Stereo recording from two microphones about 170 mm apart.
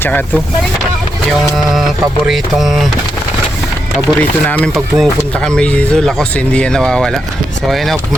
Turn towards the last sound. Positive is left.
turn(degrees=0)  # may be behind; listen again after turning